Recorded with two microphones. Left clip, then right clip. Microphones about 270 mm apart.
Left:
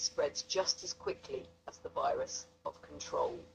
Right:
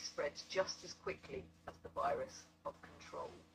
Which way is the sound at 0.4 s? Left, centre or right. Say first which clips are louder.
Left 5 dB; left.